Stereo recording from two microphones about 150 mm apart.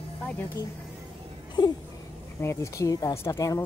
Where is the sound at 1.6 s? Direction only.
30° left (ahead or behind).